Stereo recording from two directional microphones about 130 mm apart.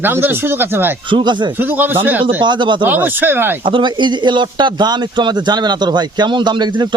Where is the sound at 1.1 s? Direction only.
35° right (ahead or behind).